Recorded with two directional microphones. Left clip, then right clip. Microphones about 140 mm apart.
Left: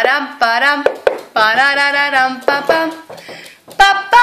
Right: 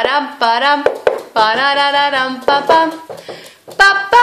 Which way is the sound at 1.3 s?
10° right (ahead or behind).